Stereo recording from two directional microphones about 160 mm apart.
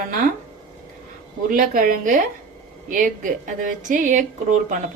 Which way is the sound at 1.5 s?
60° right (ahead or behind).